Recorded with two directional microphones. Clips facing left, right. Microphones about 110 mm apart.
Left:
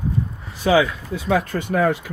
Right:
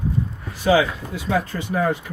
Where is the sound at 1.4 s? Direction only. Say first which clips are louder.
Left 3 dB; 55° left (ahead or behind); by 2.0 s 75° left (ahead or behind).